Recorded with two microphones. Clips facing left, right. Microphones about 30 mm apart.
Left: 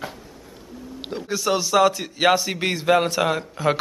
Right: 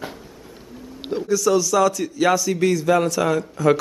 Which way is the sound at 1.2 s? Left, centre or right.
Left.